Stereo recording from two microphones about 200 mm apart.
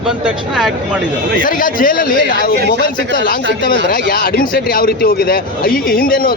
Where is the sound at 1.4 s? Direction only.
45° left (ahead or behind).